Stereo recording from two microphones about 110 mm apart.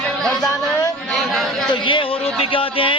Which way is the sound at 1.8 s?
55° left (ahead or behind).